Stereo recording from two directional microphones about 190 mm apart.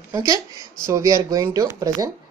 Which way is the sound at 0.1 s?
15° right (ahead or behind).